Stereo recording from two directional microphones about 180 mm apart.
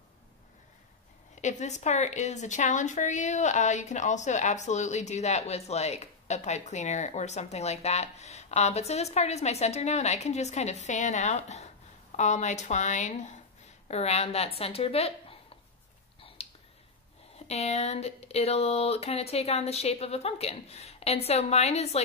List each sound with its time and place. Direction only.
1.3 s a woman's voice: 40° left (ahead or behind)
16.4 s a sound: 35° left (ahead or behind)
17.5 s a woman's voice: 35° left (ahead or behind)